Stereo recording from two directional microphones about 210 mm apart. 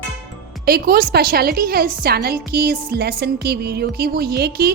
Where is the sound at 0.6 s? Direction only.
45° right (ahead or behind).